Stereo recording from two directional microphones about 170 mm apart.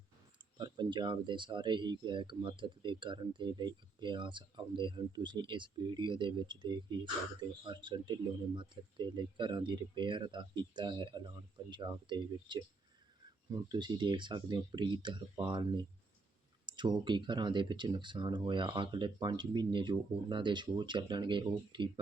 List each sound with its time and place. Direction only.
0.6 s speech: 25° right (ahead or behind)
16.6 s a sound: 25° right (ahead or behind)
17.0 s speech: 25° right (ahead or behind)